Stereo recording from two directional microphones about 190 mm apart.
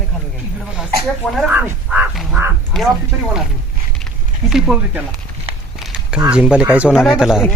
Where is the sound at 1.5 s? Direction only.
10° right (ahead or behind).